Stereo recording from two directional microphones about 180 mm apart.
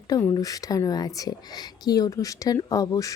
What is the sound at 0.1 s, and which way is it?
Speech, 20° left (ahead or behind).